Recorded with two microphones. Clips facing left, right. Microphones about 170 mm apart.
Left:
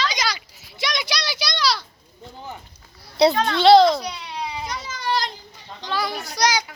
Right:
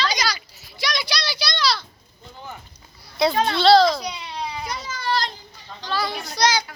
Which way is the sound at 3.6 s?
20° left (ahead or behind).